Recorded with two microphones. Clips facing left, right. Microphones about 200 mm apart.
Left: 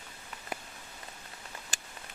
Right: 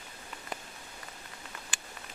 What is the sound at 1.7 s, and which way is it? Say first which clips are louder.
Patter: even; 40° left (ahead or behind).